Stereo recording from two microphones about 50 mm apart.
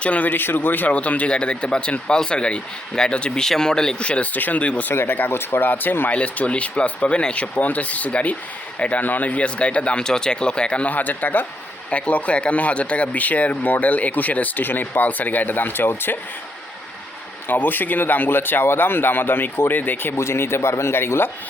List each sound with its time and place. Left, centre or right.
0.0 s speech: left
4.9 s speech: left
5.3 s speech: left
6.1 s speech: left
10.9 s speech: left
11.9 s speech: left
17.5 s speech: left
20.1 s speech: left